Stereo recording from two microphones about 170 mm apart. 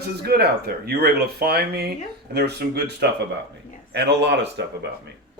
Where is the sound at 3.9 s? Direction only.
90° right.